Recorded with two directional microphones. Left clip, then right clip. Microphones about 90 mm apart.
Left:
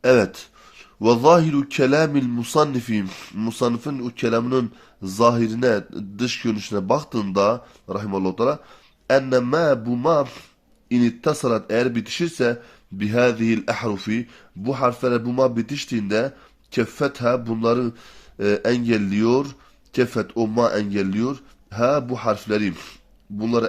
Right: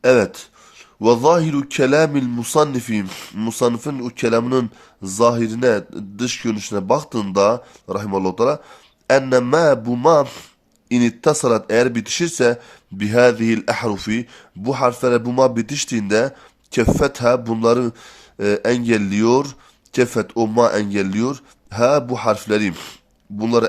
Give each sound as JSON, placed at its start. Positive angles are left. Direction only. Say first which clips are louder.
{"t": 0.0, "sound": "a man's voice", "louder": "right 2 dB", "side_deg": -25}
{"t": 3.1, "sound": "speech", "louder": "right 3 dB", "side_deg": -40}
{"t": 5.0, "sound": "a man's voice", "louder": "right 2 dB", "side_deg": -20}
{"t": 18.3, "sound": "a man's voice", "louder": "right 2 dB", "side_deg": -30}